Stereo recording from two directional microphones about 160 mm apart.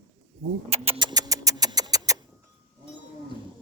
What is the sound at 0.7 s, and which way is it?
Rodents, 35° right (ahead or behind).